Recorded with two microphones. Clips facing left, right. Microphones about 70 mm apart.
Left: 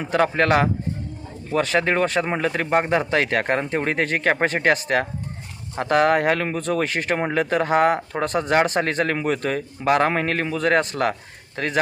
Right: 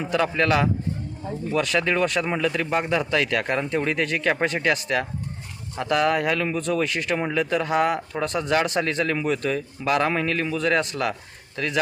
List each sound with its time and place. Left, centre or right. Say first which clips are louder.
0.1 s a man's voice: left 3 dB; left